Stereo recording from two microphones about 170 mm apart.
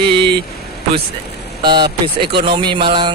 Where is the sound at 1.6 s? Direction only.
25° right (ahead or behind).